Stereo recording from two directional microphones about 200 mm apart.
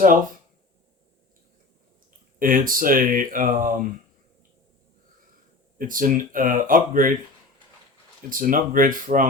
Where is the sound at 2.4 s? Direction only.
45° right (ahead or behind).